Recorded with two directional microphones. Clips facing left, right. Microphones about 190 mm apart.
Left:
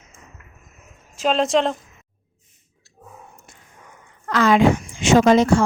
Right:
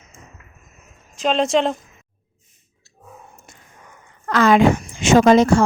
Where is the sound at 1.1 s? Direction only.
5° left (ahead or behind).